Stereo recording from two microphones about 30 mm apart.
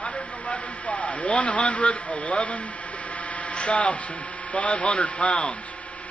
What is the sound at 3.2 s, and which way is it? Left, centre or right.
Mains hum, left.